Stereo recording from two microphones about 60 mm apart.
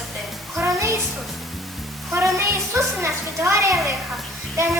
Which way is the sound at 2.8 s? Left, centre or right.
Right.